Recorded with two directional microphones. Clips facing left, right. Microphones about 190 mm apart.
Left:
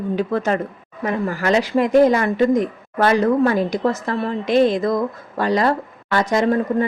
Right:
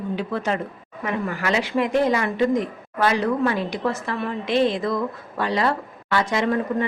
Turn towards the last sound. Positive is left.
turn(degrees=40)  # may be behind; listen again after turning